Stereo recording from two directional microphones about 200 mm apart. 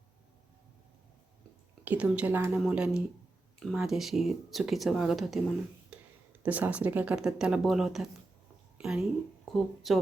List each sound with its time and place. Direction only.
1.8 s speech: 5° right (ahead or behind)
5.9 s a sound: 5° right (ahead or behind)
6.4 s speech: 5° right (ahead or behind)